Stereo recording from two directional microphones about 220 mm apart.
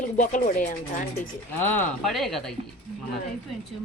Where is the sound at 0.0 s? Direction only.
35° left (ahead or behind).